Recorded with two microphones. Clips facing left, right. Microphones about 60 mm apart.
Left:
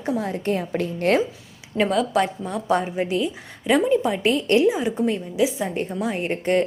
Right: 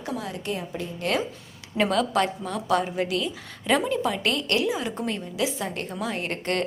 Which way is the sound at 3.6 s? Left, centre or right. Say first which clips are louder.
Left 5 dB; centre.